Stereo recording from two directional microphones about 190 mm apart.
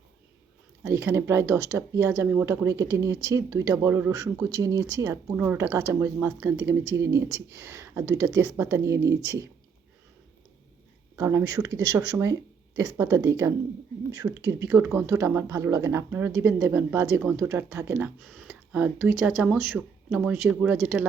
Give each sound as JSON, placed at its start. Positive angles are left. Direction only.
{"t": 0.9, "sound": "speech", "side_deg": -15}
{"t": 11.2, "sound": "speech", "side_deg": -15}